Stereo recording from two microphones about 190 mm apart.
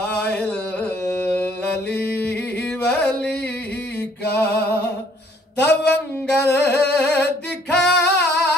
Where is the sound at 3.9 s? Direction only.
60° left (ahead or behind).